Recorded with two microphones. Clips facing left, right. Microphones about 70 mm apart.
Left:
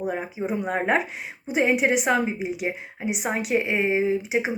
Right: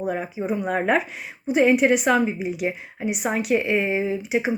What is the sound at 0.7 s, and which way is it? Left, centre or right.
A woman's voice, left.